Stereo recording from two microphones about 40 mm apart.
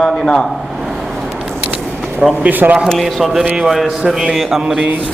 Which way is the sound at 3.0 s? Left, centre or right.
Centre.